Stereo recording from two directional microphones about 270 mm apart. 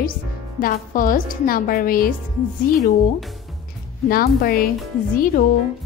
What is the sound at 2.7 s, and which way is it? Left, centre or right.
Speech, centre.